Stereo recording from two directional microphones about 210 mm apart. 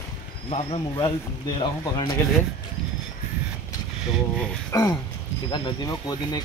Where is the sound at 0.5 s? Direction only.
30° left (ahead or behind).